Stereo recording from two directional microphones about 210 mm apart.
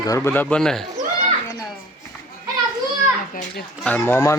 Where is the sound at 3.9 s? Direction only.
10° left (ahead or behind).